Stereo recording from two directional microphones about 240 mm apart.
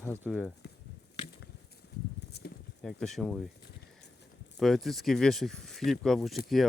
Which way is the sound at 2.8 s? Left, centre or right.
Centre.